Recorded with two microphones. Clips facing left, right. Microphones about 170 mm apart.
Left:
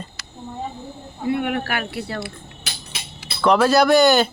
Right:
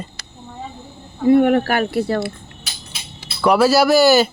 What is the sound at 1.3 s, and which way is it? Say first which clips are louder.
Speech: right 10 dB; 40° right (ahead or behind).